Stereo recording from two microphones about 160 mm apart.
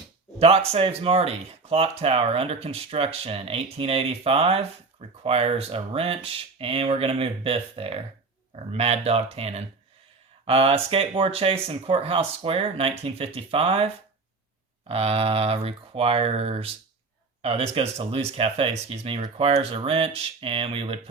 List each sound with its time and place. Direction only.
0.3 s speech: 40° right (ahead or behind)